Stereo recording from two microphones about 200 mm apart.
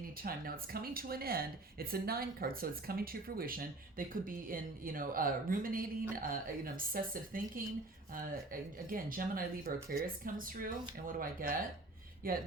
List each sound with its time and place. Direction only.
0.2 s speech: 45° right (ahead or behind)
8.9 s speech: 45° right (ahead or behind)